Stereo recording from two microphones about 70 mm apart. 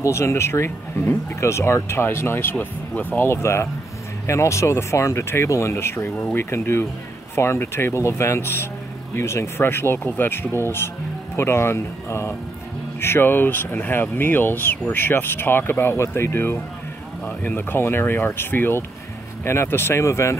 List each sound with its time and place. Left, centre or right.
0.0 s speech: left
2.6 s speech: left
3.3 s speech: left